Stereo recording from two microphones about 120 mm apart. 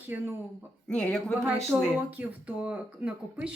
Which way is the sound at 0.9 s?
5° left (ahead or behind).